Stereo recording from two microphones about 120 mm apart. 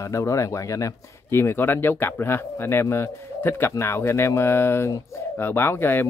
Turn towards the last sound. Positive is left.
turn(degrees=20)  # may be behind; listen again after turning